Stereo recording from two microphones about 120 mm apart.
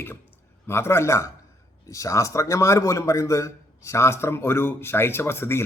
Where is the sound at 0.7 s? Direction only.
20° left (ahead or behind).